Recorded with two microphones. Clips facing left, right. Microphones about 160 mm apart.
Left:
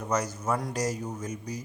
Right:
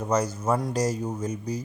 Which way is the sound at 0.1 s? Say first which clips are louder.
Right 4 dB; 30° right (ahead or behind).